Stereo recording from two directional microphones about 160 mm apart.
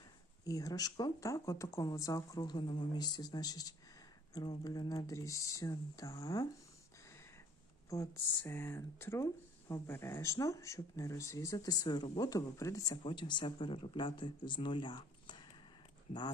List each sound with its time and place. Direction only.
0.4 s speech: 20° left (ahead or behind)
8.4 s speech: 15° left (ahead or behind)